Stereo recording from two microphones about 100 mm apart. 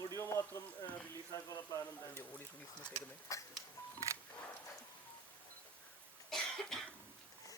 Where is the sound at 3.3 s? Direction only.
30° left (ahead or behind).